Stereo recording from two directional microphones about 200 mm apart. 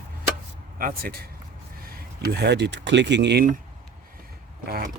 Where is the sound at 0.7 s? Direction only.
45° right (ahead or behind).